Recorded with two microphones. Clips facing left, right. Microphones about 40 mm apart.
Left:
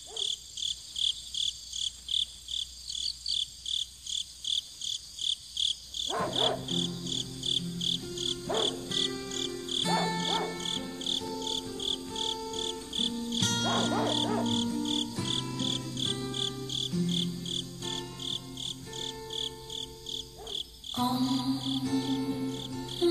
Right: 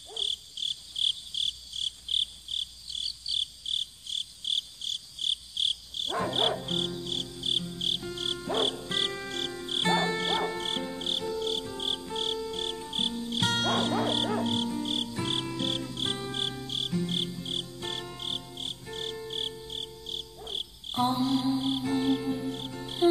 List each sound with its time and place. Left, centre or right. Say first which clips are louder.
0.1 s cricket: right 2 dB; centre
6.2 s music: right 2 dB; centre
9.3 s cricket: right 1 dB; centre
9.9 s music: right 2 dB; centre
16.5 s insect: right 1 dB; centre
16.9 s music: left 1 dB; centre
21.8 s music: right 1 dB; right